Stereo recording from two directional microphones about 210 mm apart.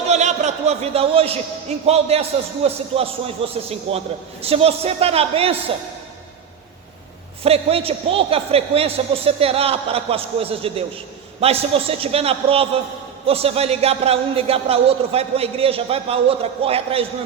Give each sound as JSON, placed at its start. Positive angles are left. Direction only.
{"t": 0.1, "sound": "a sound", "side_deg": -35}
{"t": 1.9, "sound": "a man's voice", "side_deg": -30}
{"t": 7.4, "sound": "a man's voice", "side_deg": -30}